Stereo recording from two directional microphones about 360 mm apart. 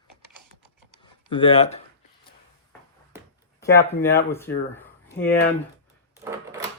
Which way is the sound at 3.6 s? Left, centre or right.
Centre.